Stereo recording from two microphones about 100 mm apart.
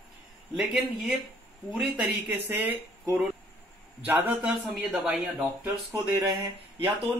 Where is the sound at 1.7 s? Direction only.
5° right (ahead or behind).